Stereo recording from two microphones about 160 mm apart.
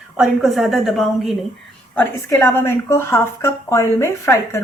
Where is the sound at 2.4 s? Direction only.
15° left (ahead or behind).